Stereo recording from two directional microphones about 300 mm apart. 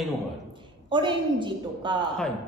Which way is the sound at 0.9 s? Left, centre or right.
Centre.